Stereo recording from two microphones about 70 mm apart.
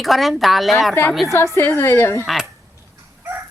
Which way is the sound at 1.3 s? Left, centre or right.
Left.